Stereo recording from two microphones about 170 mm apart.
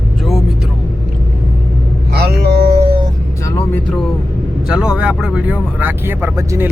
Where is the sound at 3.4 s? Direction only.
15° left (ahead or behind).